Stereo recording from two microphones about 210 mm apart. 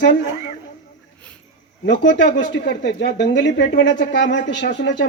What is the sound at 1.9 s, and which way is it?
Speech, 60° left (ahead or behind).